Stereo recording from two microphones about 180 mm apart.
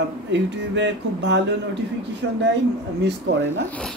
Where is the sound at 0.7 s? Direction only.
80° right.